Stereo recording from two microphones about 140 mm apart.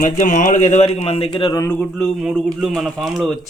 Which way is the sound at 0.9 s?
45° left (ahead or behind).